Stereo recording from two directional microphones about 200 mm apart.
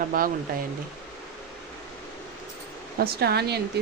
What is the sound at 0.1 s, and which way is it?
Speech, 45° right (ahead or behind).